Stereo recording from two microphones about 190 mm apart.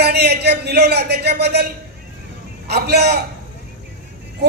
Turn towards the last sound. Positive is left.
turn(degrees=-60)  # may be behind; listen again after turning